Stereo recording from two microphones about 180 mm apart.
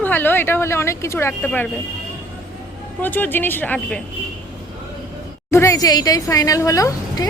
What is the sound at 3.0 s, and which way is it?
Speech, 10° left (ahead or behind).